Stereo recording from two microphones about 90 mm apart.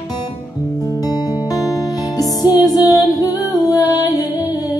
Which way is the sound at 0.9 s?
45° left (ahead or behind).